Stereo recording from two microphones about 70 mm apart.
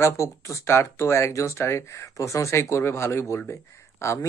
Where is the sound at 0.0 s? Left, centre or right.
Left.